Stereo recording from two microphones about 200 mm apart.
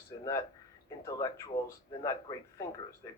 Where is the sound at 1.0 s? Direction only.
15° left (ahead or behind).